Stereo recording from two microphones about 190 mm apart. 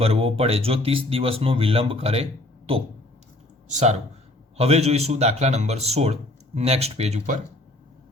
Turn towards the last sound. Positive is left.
turn(degrees=-35)  # may be behind; listen again after turning